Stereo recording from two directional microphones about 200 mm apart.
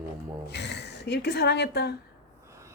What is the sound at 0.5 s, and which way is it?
A woman's voice, 60° left (ahead or behind).